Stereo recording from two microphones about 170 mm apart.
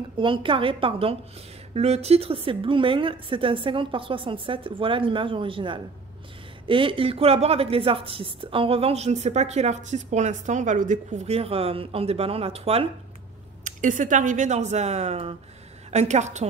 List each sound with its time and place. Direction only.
0.2 s speech: 30° right (ahead or behind)
13.7 s speech: 50° right (ahead or behind)